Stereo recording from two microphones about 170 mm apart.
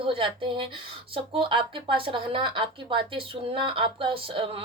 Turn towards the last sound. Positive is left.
turn(degrees=-30)  # may be behind; listen again after turning